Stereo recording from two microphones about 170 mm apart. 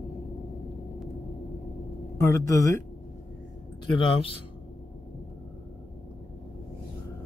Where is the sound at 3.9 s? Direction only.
30° left (ahead or behind).